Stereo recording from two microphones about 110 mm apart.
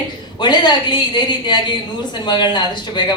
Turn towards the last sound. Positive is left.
turn(degrees=45)  # may be behind; listen again after turning